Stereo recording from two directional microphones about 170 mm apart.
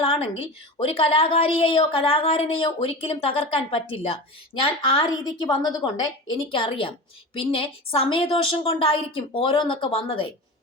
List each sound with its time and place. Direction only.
0.0 s a woman's voice: 35° left (ahead or behind)